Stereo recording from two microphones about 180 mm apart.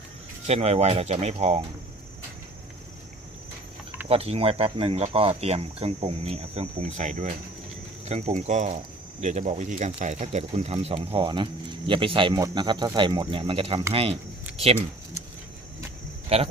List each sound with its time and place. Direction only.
0.4 s speech: 35° right (ahead or behind)
4.1 s speech: 35° right (ahead or behind)
16.3 s speech: 35° right (ahead or behind)